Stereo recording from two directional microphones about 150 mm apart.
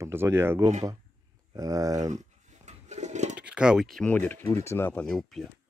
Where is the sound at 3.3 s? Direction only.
5° right (ahead or behind); by 5.0 s 15° left (ahead or behind).